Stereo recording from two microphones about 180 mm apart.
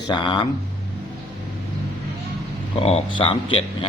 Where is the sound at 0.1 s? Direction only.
25° left (ahead or behind).